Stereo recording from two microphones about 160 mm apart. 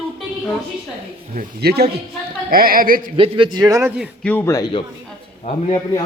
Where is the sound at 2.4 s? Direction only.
65° right (ahead or behind).